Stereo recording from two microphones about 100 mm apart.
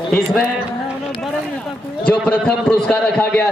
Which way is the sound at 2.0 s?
10° left (ahead or behind).